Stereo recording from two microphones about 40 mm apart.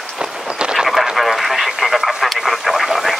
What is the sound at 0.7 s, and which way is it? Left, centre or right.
Radio, centre.